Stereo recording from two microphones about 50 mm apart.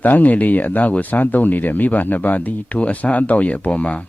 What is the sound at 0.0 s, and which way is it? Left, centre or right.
Speech, left.